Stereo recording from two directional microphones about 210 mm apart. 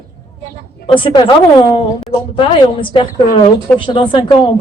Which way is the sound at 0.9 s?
25° left (ahead or behind).